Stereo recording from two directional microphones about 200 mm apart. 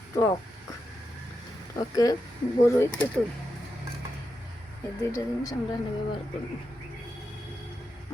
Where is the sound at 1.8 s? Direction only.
20° left (ahead or behind).